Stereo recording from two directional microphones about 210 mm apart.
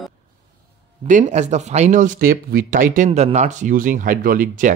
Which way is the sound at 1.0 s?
35° right (ahead or behind).